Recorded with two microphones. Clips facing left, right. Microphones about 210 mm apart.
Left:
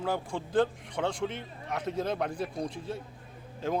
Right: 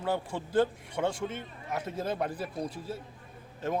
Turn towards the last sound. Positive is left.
turn(degrees=0)  # may be behind; listen again after turning